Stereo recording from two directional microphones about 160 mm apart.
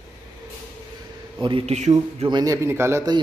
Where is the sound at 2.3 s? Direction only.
20° right (ahead or behind).